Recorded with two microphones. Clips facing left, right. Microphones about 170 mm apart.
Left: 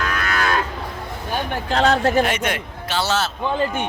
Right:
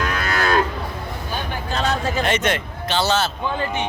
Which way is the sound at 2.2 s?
10° left (ahead or behind).